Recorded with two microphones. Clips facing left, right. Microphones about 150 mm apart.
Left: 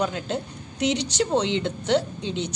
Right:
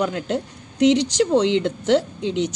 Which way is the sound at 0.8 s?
90° right.